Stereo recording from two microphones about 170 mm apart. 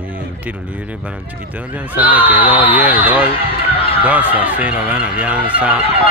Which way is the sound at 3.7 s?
35° left (ahead or behind).